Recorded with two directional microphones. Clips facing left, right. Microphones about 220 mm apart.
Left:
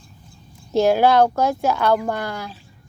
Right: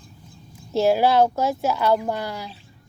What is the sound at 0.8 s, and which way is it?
Speech, centre (ahead or behind).